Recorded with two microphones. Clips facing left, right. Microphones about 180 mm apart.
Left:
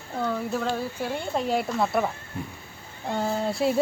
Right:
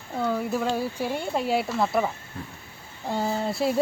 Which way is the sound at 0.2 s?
10° right (ahead or behind).